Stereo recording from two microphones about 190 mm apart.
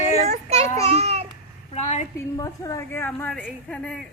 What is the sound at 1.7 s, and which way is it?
Speech, 35° left (ahead or behind).